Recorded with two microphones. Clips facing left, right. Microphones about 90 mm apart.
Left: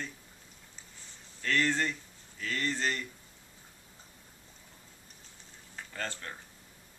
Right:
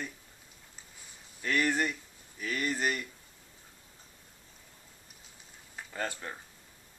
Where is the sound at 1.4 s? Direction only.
15° right (ahead or behind).